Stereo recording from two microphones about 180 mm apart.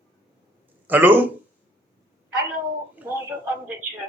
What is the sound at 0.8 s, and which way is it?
Speech, 10° right (ahead or behind).